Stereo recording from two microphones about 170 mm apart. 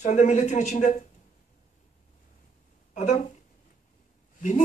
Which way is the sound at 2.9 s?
45° left (ahead or behind).